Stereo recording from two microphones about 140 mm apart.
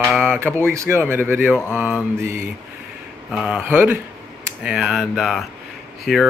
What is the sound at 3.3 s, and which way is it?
Speech, 5° right (ahead or behind).